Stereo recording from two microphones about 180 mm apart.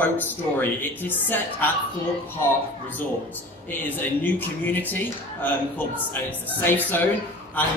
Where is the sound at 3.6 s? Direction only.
10° left (ahead or behind).